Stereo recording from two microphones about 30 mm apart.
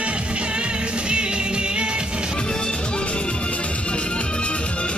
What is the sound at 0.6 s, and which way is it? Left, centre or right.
Music, right.